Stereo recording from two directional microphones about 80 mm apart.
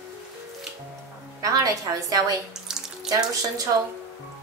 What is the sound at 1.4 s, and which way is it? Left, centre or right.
Speech, right.